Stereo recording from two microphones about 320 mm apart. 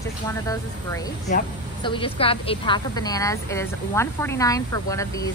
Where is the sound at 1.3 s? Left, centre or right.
Centre.